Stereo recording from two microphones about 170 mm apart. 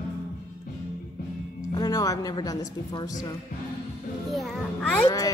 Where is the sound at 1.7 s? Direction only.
25° left (ahead or behind).